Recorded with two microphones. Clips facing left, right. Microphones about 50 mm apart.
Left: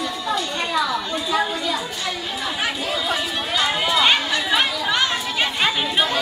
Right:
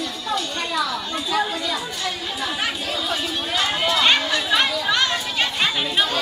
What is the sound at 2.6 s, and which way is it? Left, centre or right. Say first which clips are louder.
Chatter: left 2 dB; centre.